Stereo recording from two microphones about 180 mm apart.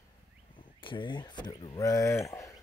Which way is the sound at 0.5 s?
25° left (ahead or behind).